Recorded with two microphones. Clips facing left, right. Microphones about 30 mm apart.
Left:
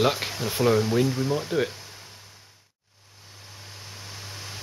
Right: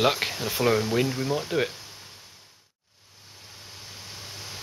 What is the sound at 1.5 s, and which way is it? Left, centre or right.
Speech, centre.